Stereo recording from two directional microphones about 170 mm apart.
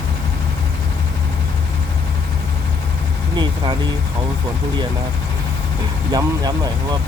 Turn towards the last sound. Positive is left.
turn(degrees=-25)  # may be behind; listen again after turning